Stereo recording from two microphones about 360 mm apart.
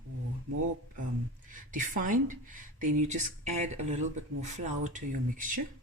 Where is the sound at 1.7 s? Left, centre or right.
Right.